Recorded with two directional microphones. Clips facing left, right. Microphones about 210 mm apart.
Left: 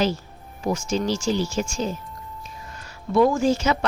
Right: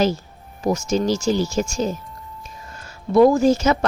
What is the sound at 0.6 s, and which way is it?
A woman's voice, 40° right (ahead or behind).